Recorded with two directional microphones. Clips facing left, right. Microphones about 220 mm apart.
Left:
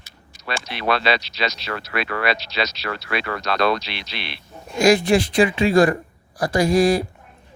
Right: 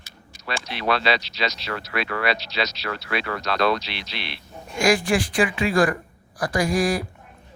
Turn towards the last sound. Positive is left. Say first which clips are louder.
# left 5 dB
turn(degrees=25)  # may be behind; listen again after turning